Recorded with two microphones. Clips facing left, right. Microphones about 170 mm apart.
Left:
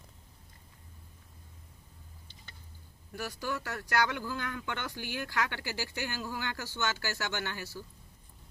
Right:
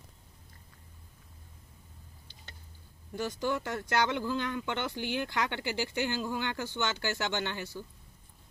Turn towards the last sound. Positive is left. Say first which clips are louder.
# right 3 dB
turn(degrees=-20)  # may be behind; listen again after turning